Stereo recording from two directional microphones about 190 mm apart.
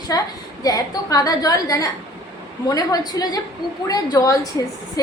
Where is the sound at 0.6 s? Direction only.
20° left (ahead or behind).